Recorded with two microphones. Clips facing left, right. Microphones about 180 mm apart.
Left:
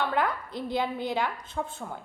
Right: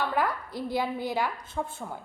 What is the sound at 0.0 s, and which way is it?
A woman's voice, centre (ahead or behind).